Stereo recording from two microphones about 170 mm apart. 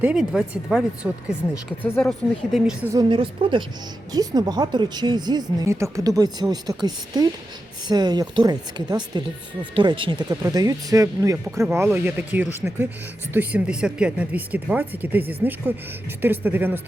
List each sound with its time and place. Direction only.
0.0 s speech: 5° right (ahead or behind)
2.9 s speech: 25° right (ahead or behind)